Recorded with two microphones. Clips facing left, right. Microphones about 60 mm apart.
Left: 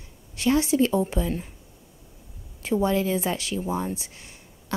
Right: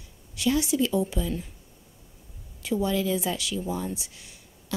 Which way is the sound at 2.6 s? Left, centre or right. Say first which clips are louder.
Left 3 dB; left.